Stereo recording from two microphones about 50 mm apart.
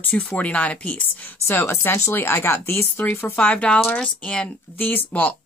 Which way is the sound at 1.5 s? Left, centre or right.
Left.